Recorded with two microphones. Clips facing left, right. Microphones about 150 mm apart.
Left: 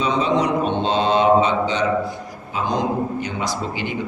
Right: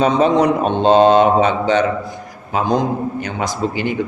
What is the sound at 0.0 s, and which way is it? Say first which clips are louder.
A man's voice: right 6 dB; 50° right (ahead or behind).